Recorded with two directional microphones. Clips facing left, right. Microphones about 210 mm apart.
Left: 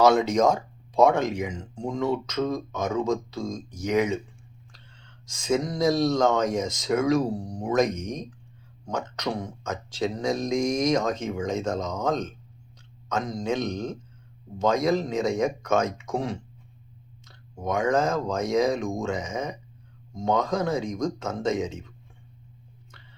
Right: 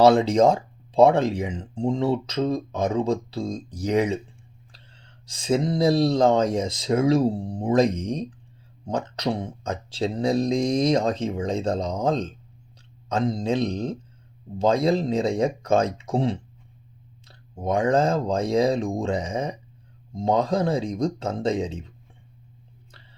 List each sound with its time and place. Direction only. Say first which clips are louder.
0.0 s speech: right 3 dB; 30° right (ahead or behind)
5.3 s speech: right 3 dB; 30° right (ahead or behind)
17.6 s speech: right 3 dB; 30° right (ahead or behind)